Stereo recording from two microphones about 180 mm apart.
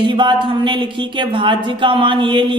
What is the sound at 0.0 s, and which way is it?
Speech, 25° right (ahead or behind).